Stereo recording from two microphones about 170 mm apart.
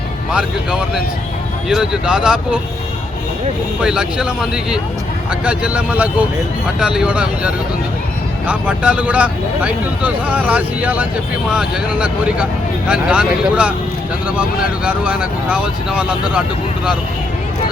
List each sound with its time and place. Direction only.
0.3 s speech: 5° right (ahead or behind)
3.8 s speech: 5° right (ahead or behind)
14.8 s speech: 5° right (ahead or behind)